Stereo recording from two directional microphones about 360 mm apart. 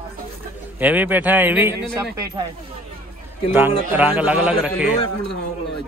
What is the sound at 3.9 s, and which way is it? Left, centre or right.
A man's voice, centre.